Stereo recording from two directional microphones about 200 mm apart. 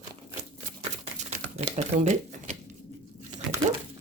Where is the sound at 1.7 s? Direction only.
35° right (ahead or behind).